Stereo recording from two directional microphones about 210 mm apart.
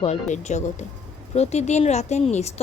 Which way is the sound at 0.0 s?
35° left (ahead or behind).